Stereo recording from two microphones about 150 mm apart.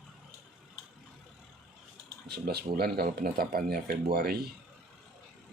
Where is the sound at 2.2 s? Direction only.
90° right.